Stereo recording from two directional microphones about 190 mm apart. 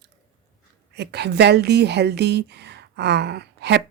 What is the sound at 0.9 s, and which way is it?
Speech, 60° right (ahead or behind).